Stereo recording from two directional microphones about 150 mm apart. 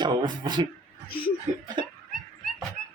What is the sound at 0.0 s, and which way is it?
Speech, 30° right (ahead or behind).